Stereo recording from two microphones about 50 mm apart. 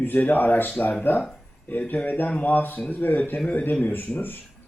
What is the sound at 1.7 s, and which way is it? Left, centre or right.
Speech, left.